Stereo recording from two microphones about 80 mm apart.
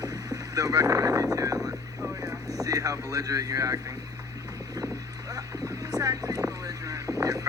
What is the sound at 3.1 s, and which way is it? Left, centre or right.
Speech, right.